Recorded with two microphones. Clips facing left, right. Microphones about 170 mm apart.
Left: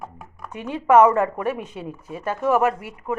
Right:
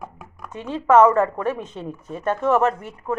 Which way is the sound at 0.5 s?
15° left (ahead or behind).